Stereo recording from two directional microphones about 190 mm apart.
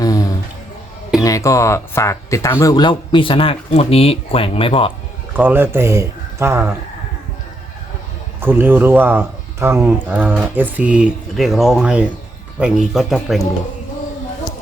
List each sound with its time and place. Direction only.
0.0 s music: 20° left (ahead or behind)
1.2 s speech: 15° left (ahead or behind)
5.4 s speech: 10° right (ahead or behind)
8.4 s speech: 10° right (ahead or behind)